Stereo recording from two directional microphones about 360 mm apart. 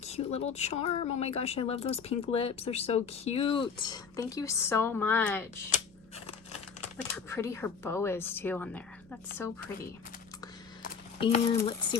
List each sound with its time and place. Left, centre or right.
0.0 s a sound: centre
0.5 s speech: centre
7.3 s a woman's voice: centre
10.8 s speech: centre